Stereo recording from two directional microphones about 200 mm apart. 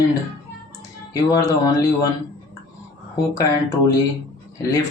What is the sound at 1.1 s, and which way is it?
Speech, 15° left (ahead or behind).